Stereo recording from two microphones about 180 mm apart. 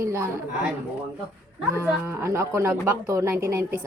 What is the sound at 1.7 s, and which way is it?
Speech, 15° right (ahead or behind).